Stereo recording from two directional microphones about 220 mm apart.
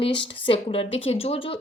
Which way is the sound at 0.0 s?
25° left (ahead or behind).